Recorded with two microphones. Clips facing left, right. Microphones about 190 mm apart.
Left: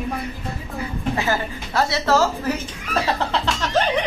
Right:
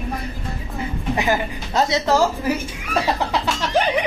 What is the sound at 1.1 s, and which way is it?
Speech, 15° right (ahead or behind).